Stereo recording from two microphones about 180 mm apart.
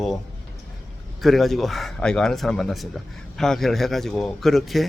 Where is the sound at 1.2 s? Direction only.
Centre (ahead or behind).